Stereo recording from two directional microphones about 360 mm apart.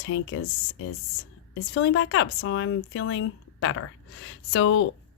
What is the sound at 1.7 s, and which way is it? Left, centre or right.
Speech, left.